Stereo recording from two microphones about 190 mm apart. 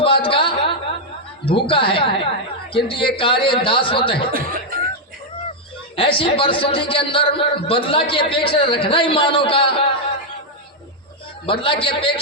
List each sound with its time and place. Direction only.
0.0 s a sound: 25° left (ahead or behind)
1.5 s a man's voice: 25° left (ahead or behind)
4.3 s music: 50° right (ahead or behind)
6.0 s a man's voice: 30° left (ahead or behind)
11.4 s a man's voice: 25° left (ahead or behind)